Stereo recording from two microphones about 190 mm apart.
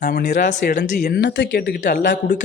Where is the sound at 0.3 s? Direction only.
40° left (ahead or behind).